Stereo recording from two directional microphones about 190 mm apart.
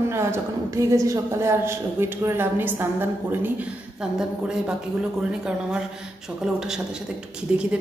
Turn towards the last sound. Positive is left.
turn(degrees=-5)  # may be behind; listen again after turning